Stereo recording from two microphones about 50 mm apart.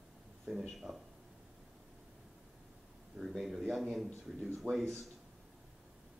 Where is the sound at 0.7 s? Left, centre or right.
Centre.